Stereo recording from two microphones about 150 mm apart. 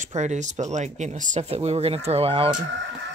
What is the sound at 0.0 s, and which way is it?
Speech, 50° right (ahead or behind).